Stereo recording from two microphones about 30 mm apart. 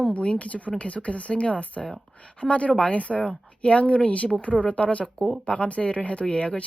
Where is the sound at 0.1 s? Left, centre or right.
Left.